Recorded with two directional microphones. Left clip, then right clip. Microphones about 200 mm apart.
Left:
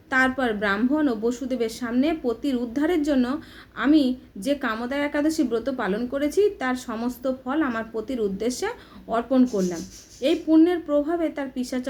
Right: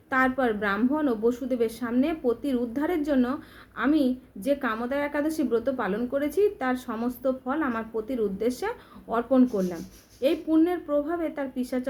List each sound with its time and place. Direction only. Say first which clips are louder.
0.1 s a woman's voice: left 2 dB; centre (ahead or behind)